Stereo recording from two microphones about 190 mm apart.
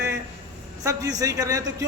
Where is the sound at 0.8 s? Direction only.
20° right (ahead or behind).